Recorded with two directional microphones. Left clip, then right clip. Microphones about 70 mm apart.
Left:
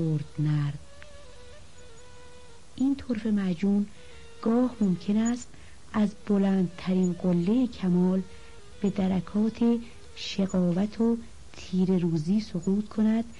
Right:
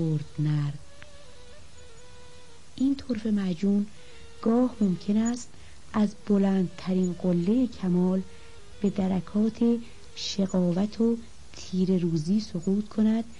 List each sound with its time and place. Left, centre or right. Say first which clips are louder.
0.1 s speech: even; right
3.0 s speech: even; right
4.4 s a woman's voice: right 1 dB; centre
4.6 s a woman's voice: right 1 dB; right
4.9 s a woman's voice: even; right
6.3 s a woman's voice: right 1 dB; right; by 8.1 s centre
8.7 s speech: even; right
10.4 s a woman's voice: even; right
11.5 s speech: even; right
11.9 s speech: right 1 dB; right
12.5 s a woman's voice: right 1 dB; right